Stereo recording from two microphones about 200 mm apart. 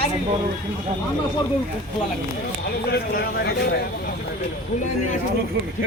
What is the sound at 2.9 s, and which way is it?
Speech, 55° left (ahead or behind).